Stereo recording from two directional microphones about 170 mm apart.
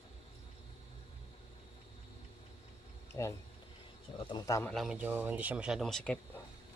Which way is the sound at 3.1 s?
15° left (ahead or behind).